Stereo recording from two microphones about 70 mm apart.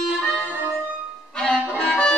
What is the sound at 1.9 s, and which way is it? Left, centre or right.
Music, centre.